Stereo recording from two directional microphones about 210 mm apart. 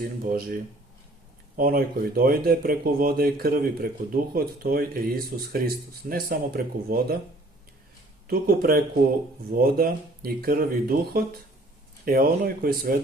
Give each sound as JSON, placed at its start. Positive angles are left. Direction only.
{"t": 0.0, "sound": "speech", "side_deg": -45}
{"t": 8.3, "sound": "speech", "side_deg": -45}